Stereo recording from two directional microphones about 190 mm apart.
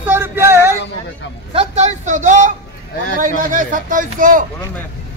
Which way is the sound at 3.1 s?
45° right (ahead or behind).